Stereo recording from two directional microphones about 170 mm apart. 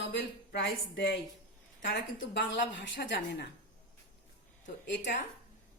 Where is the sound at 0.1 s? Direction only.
90° left.